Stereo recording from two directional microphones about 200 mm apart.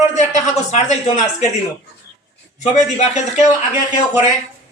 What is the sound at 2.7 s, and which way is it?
Speech, 35° left (ahead or behind).